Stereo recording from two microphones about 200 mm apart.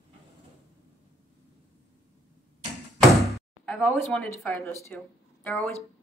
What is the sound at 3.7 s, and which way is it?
A woman's voice, 5° left (ahead or behind).